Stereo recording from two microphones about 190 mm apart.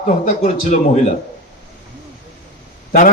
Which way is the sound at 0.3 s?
40° left (ahead or behind).